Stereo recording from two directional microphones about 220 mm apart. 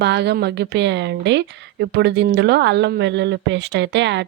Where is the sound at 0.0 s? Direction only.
50° right (ahead or behind).